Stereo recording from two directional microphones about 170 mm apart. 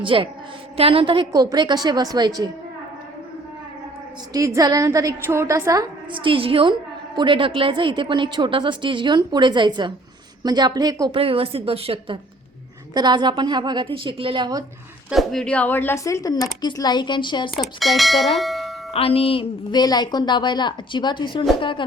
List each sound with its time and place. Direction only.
0.0 s a woman's voice: 30° right (ahead or behind)
4.3 s a woman's voice: 20° right (ahead or behind)
11.2 s a woman's voice: 35° right (ahead or behind)
15.1 s a woman's voice: centre (ahead or behind); by 17.5 s 30° left (ahead or behind)
17.5 s speech: centre (ahead or behind)
18.9 s a woman's voice: 35° left (ahead or behind)